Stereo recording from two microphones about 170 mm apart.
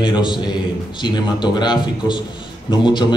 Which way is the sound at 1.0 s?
25° left (ahead or behind).